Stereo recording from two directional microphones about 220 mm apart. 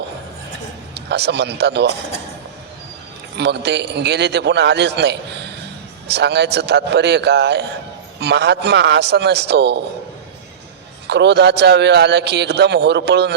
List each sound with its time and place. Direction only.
0.9 s speech: 50° right (ahead or behind)
3.3 s a man's voice: 50° right (ahead or behind)
11.1 s a man's voice: 50° right (ahead or behind)